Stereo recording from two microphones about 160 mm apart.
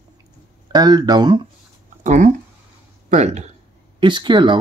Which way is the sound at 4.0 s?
30° right (ahead or behind).